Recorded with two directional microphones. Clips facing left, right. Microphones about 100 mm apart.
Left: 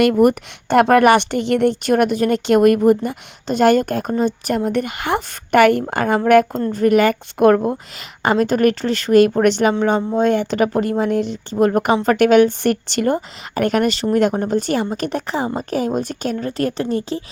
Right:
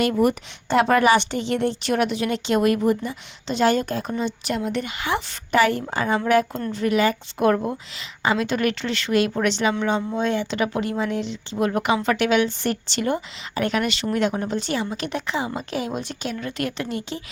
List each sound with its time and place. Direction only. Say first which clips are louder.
0.0 s a woman's voice: left 6 dB; 55° left (ahead or behind)
9.7 s a woman's voice: left 6 dB; 40° left (ahead or behind)